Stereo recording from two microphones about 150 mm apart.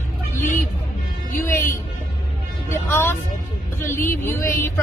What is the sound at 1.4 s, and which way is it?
Speech, 15° left (ahead or behind).